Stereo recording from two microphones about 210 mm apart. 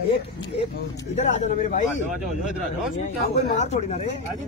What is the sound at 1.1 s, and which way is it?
Speech, 35° left (ahead or behind).